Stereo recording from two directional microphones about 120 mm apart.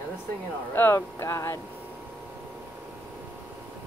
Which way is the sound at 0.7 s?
20° left (ahead or behind).